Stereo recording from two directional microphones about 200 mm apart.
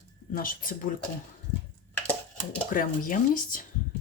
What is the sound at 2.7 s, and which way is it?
Speech, 40° left (ahead or behind).